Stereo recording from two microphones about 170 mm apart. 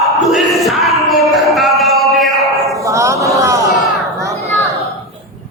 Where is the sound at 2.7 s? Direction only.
20° right (ahead or behind).